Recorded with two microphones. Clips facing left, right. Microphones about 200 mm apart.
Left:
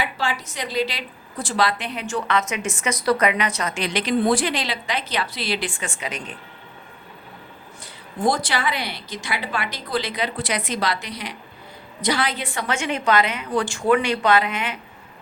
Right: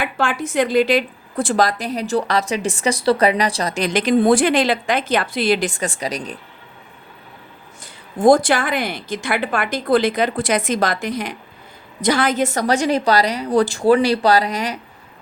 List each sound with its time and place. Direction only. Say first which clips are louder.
0.0 s a woman's voice: right 5 dB; 50° right (ahead or behind)
8.2 s a woman's voice: right 9 dB; 50° right (ahead or behind)